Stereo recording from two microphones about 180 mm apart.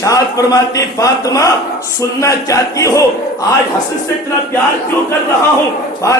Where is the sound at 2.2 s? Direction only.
20° left (ahead or behind).